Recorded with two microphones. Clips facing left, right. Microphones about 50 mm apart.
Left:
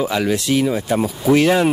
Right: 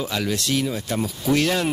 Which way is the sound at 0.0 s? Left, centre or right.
Centre.